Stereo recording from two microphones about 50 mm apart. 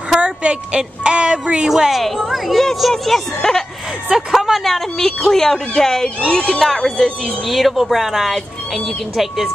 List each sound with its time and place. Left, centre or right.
0.2 s speech: right
1.7 s a woman's voice: centre
4.1 s speech: centre
6.0 s speech: centre
7.4 s a woman's voice: centre